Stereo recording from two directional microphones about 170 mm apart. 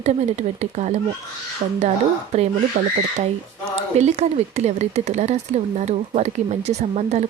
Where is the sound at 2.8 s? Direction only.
50° right (ahead or behind).